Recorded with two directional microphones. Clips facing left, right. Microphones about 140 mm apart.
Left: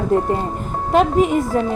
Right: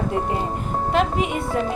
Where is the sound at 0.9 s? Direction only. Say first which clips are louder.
Left 8 dB; 40° left (ahead or behind).